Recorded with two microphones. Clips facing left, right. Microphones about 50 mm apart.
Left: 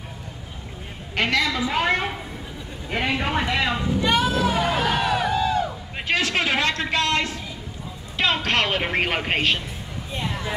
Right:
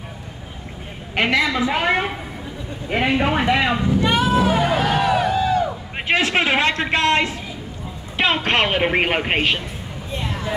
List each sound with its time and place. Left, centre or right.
1.1 s a woman's voice: centre
4.3 s hubbub: centre
4.6 s music: centre
5.9 s a sound: right
8.2 s speech: right